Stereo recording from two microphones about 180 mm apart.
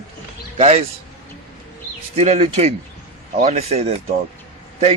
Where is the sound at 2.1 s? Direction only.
40° right (ahead or behind).